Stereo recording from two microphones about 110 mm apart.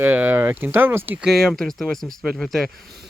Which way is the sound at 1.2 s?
Centre (ahead or behind).